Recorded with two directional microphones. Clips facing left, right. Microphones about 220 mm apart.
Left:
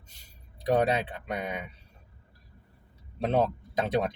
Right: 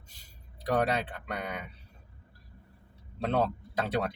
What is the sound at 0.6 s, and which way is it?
Speech, 20° left (ahead or behind).